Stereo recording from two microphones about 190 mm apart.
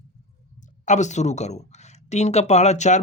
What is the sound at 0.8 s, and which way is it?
Speech, 40° left (ahead or behind).